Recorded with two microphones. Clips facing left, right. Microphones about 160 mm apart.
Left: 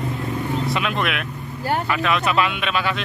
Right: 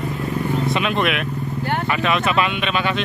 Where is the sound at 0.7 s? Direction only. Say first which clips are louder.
Right 3 dB; centre (ahead or behind).